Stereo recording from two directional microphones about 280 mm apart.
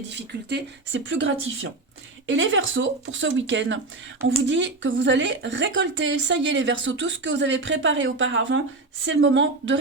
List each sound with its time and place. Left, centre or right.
0.1 s a woman's voice: right